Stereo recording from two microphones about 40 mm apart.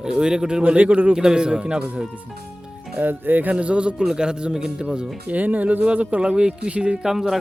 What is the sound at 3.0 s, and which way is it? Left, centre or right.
Speech, right.